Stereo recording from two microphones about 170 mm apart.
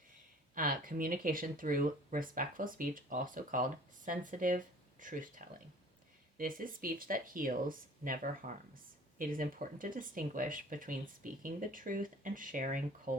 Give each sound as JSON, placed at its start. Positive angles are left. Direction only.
{"t": 0.5, "sound": "speech", "side_deg": -55}